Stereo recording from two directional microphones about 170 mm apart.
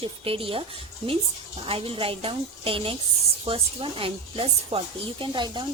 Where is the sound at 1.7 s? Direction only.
35° right (ahead or behind).